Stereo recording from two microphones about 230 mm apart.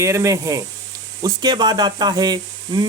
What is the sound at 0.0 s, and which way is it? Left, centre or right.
Speech, centre.